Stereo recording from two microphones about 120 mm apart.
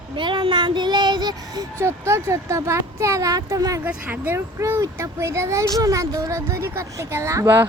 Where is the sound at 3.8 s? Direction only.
15° right (ahead or behind).